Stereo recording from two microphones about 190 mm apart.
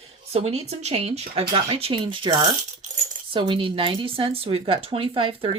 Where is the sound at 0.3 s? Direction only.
35° right (ahead or behind).